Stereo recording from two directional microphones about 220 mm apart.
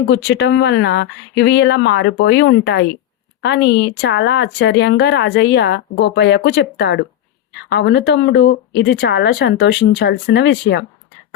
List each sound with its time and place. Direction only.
0.1 s speech: 50° left (ahead or behind)